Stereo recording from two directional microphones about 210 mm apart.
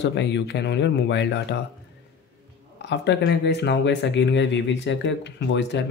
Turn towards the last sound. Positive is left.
turn(degrees=55)  # may be behind; listen again after turning